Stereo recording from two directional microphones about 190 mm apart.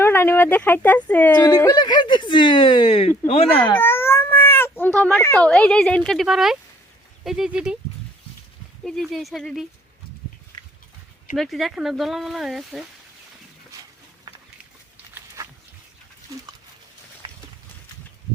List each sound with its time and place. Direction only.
0.0 s speech: 10° left (ahead or behind)
1.3 s speech: 20° left (ahead or behind)
3.8 s cat: 10° left (ahead or behind)
5.5 s speech: 5° left (ahead or behind)
8.8 s speech: centre (ahead or behind)
11.3 s speech: centre (ahead or behind)
17.2 s clip-clop: 25° right (ahead or behind)